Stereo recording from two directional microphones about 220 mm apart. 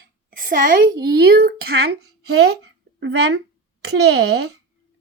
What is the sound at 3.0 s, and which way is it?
Speech, 50° right (ahead or behind).